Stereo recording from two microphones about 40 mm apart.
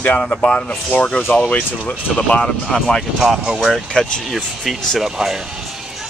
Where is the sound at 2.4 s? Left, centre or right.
Centre.